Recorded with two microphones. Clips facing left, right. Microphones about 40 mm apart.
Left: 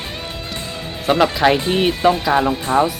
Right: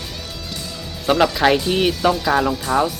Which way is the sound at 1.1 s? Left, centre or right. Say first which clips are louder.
Left 1 dB; left.